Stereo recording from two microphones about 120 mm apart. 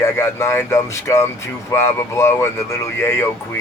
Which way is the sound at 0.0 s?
25° left (ahead or behind).